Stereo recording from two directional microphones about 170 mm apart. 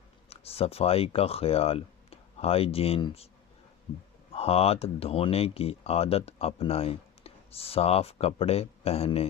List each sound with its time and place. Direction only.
0.3 s speech: 35° left (ahead or behind)
4.3 s speech: 35° left (ahead or behind)